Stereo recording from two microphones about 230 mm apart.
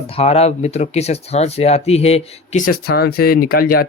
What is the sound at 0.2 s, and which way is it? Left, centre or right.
Speech, left.